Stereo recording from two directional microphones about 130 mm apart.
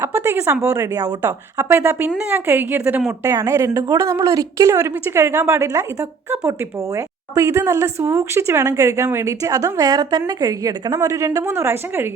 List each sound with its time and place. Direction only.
0.0 s a woman's voice: 15° right (ahead or behind)